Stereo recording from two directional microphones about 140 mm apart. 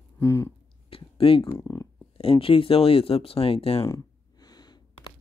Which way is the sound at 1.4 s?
20° left (ahead or behind).